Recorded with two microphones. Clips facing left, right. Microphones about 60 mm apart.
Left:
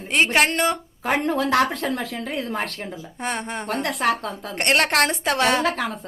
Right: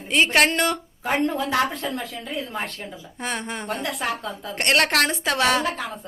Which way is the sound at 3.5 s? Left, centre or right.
Left.